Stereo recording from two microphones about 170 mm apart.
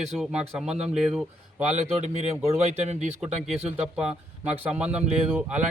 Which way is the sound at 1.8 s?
40° right (ahead or behind).